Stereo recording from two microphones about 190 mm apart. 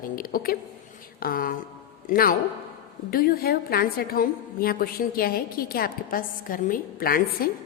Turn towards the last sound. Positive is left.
turn(degrees=50)  # may be behind; listen again after turning